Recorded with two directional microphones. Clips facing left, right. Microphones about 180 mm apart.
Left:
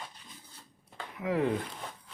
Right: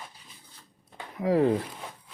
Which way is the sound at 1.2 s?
35° right (ahead or behind).